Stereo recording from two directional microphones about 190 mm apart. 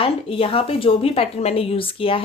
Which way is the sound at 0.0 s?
30° left (ahead or behind).